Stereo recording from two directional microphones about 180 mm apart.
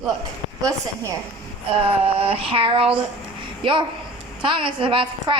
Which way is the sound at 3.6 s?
25° right (ahead or behind).